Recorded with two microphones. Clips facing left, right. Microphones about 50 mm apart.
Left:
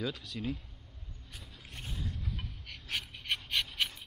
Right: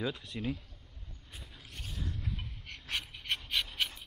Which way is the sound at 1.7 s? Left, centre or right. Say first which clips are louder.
Left 2 dB; centre.